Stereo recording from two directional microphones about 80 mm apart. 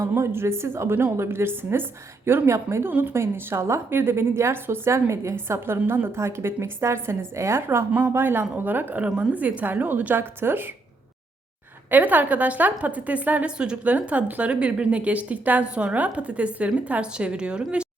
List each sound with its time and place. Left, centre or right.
0.0 s a woman's voice: right
11.9 s a woman's voice: right